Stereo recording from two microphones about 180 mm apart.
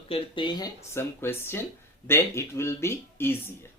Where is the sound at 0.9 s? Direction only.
15° left (ahead or behind).